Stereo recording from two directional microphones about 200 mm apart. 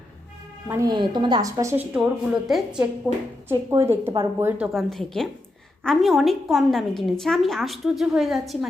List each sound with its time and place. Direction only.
0.7 s a woman's voice: 20° right (ahead or behind); by 8.5 s centre (ahead or behind)